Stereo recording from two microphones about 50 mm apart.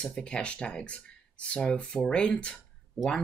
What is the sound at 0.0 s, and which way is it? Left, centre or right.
Speech, centre.